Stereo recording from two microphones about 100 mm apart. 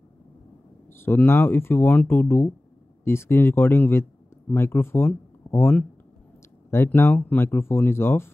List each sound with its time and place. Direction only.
0.9 s speech: 25° left (ahead or behind)